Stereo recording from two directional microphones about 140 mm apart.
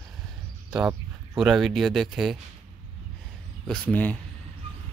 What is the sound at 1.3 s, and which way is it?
Speech, centre (ahead or behind).